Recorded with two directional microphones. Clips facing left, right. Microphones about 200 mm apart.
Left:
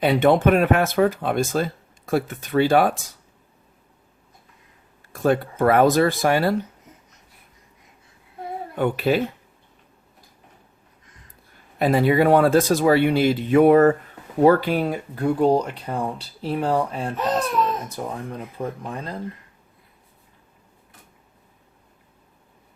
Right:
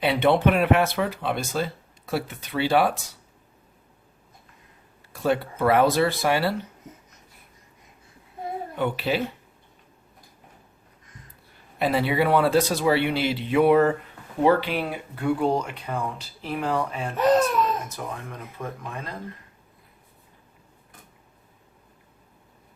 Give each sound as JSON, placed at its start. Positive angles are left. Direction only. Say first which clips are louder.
{"t": 0.0, "sound": "speech", "louder": "left 3 dB", "side_deg": 45}
{"t": 5.1, "sound": "speech", "louder": "left 4 dB", "side_deg": 45}
{"t": 8.7, "sound": "speech", "louder": "left 5 dB", "side_deg": 50}
{"t": 11.8, "sound": "speech", "louder": "left 5 dB", "side_deg": 45}